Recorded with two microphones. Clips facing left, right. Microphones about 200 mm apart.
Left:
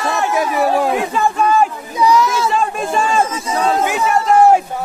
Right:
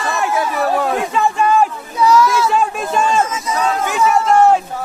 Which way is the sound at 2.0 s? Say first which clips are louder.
Right 1 dB; 15° left (ahead or behind).